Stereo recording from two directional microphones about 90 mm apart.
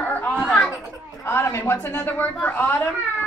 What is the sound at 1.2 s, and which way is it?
A woman's voice, 30° left (ahead or behind).